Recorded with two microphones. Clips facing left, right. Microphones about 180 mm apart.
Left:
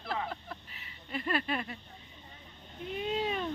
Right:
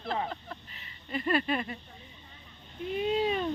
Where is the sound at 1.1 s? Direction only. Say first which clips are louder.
Right 4 dB; centre (ahead or behind).